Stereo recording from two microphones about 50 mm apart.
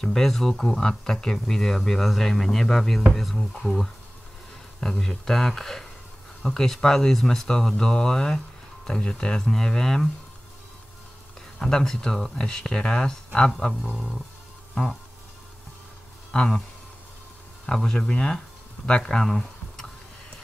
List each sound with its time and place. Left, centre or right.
0.0 s speech: centre
11.6 s speech: centre
13.8 s speech: centre
16.3 s speech: centre
17.6 s speech: centre